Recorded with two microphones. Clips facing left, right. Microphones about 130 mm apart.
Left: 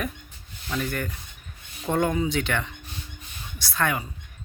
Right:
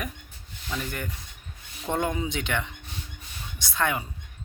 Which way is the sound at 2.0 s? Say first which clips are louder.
Left 4 dB; 20° right (ahead or behind).